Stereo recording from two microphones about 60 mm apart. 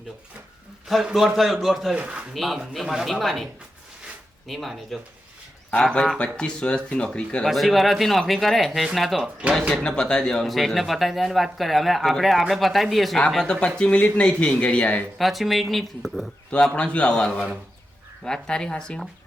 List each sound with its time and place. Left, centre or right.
0.9 s speech: centre
2.0 s speech: right
2.3 s speech: centre
5.7 s speech: centre
7.4 s speech: centre
9.8 s speech: centre
15.2 s speech: centre
16.5 s speech: centre
17.1 s speech: centre